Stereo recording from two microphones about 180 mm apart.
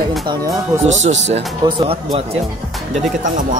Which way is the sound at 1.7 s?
30° right (ahead or behind).